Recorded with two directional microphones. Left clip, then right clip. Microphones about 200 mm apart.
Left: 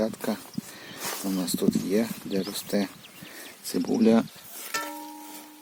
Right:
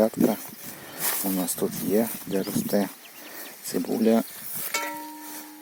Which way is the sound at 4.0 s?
20° left (ahead or behind).